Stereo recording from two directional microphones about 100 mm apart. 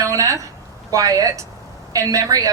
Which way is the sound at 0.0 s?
35° right (ahead or behind).